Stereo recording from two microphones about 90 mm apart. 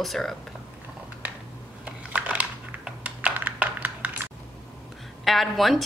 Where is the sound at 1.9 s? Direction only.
15° right (ahead or behind).